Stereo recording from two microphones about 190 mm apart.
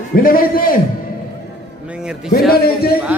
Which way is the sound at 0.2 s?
50° left (ahead or behind).